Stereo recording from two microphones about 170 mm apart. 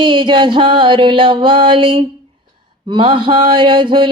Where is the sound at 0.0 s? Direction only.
30° right (ahead or behind).